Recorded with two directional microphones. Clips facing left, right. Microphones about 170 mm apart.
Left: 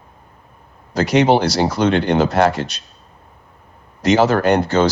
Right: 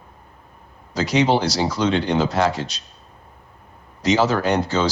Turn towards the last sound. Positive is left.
turn(degrees=55)  # may be behind; listen again after turning